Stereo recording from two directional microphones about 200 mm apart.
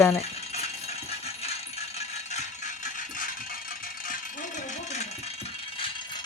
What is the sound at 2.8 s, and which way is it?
Rattle, 40° left (ahead or behind).